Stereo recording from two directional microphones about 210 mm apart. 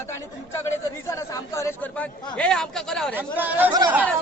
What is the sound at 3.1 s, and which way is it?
Speech, 10° right (ahead or behind).